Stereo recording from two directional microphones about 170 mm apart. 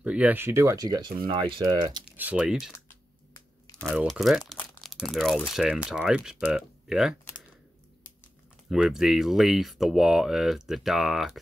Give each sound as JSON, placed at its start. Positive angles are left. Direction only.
{"t": 0.0, "sound": "speech", "side_deg": -10}
{"t": 2.0, "sound": "speech", "side_deg": -10}
{"t": 3.9, "sound": "speech", "side_deg": -5}
{"t": 8.6, "sound": "speech", "side_deg": -5}